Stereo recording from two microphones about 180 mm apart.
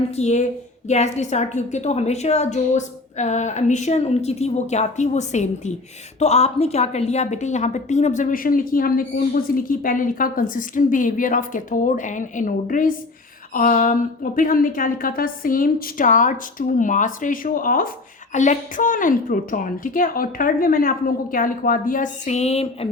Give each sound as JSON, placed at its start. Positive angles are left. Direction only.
{"t": 0.2, "sound": "a woman's voice", "side_deg": 40}